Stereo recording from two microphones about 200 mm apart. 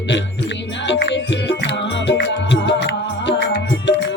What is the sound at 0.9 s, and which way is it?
Music, 60° left (ahead or behind).